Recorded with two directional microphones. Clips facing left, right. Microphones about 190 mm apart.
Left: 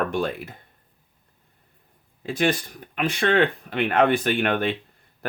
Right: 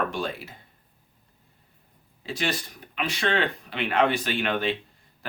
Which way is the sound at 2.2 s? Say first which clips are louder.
Left 7 dB; 55° left (ahead or behind).